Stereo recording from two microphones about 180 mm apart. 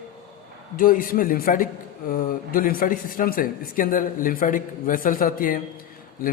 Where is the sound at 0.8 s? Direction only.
50° left (ahead or behind).